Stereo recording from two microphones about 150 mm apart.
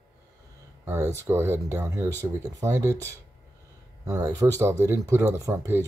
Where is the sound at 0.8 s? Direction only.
20° right (ahead or behind).